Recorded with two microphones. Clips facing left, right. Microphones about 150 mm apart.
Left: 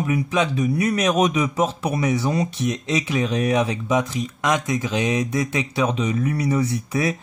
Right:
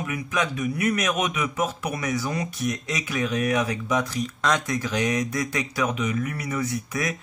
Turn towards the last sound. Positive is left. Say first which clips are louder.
# left 5 dB
turn(degrees=30)  # may be behind; listen again after turning